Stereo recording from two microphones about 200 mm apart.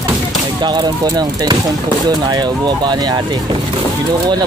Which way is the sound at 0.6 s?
20° right (ahead or behind).